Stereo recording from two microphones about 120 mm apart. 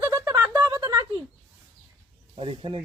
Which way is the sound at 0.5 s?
30° right (ahead or behind).